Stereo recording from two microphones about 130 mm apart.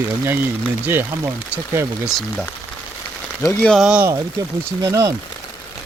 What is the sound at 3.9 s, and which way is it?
Speech, 15° right (ahead or behind).